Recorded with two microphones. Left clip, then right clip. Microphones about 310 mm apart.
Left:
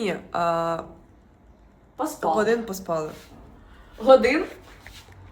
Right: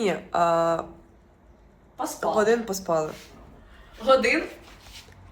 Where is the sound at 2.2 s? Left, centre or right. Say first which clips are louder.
Even; centre.